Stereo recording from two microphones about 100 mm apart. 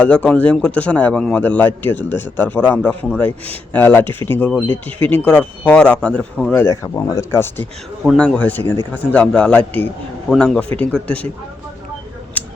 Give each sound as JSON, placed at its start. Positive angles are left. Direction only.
{"t": 0.0, "sound": "speech", "side_deg": 10}
{"t": 6.6, "sound": "speech", "side_deg": 30}
{"t": 8.0, "sound": "speech", "side_deg": 5}
{"t": 12.4, "sound": "a sound", "side_deg": 15}